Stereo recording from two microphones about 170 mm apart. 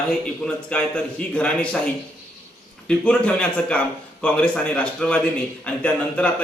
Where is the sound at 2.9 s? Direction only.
5° left (ahead or behind).